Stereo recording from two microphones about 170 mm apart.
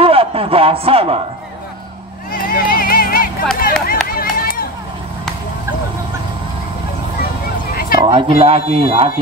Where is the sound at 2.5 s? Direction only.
55° left (ahead or behind).